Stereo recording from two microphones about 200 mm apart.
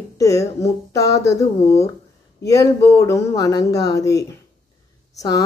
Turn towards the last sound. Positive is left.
turn(degrees=15)  # may be behind; listen again after turning